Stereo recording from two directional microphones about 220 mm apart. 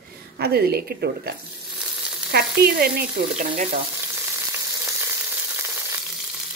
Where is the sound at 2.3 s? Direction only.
45° right (ahead or behind).